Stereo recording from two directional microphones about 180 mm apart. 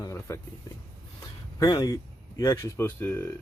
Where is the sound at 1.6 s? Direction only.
20° left (ahead or behind).